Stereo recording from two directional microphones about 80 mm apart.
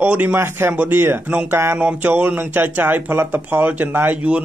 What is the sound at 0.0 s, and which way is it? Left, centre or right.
Speech, centre.